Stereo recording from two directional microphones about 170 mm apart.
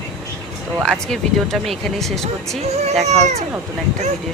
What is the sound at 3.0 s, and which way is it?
Speech, 40° right (ahead or behind).